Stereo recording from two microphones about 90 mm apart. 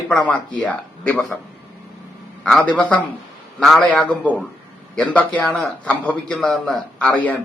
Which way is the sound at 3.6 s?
5° left (ahead or behind).